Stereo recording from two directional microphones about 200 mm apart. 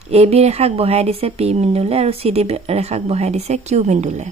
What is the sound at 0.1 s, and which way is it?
Speech, 30° right (ahead or behind).